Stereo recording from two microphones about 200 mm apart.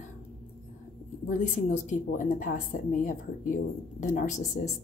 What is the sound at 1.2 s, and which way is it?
A woman's voice, 35° left (ahead or behind).